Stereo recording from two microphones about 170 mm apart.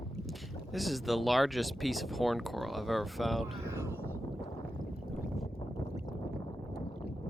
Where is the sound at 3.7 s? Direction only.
15° right (ahead or behind).